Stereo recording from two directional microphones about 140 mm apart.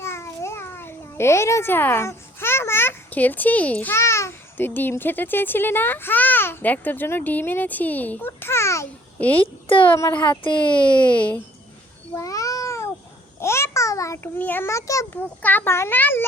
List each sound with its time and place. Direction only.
0.0 s a child's voice: 20° left (ahead or behind)
10.2 s speech: 35° left (ahead or behind)
11.0 s a child's voice: 10° left (ahead or behind)
12.1 s cat: 25° left (ahead or behind)
13.4 s babbling: 20° left (ahead or behind)
14.4 s a child's voice: 15° left (ahead or behind)